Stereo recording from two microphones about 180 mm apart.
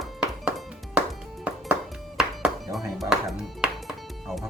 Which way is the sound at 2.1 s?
Centre (ahead or behind).